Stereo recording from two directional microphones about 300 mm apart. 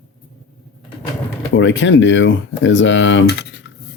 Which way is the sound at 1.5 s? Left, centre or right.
Left.